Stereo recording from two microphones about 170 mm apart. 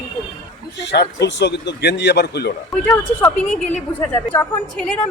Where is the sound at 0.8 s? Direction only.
90° left.